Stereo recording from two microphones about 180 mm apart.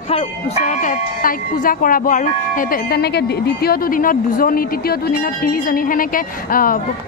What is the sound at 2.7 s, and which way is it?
A woman's voice, 60° left (ahead or behind).